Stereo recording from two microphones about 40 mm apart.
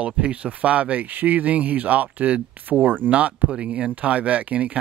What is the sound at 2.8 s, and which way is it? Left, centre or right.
Speech, right.